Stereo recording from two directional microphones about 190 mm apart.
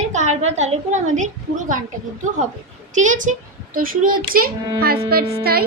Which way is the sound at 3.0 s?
40° right (ahead or behind).